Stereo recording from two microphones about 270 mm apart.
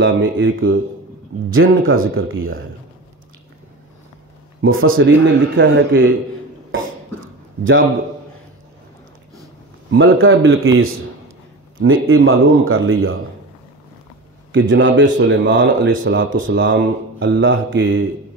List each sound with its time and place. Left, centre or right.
0.0 s a man's voice: right
4.6 s a man's voice: right
9.8 s a man's voice: right
14.5 s a man's voice: right